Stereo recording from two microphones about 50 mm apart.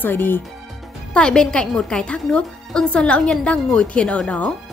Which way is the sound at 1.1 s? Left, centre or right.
Centre.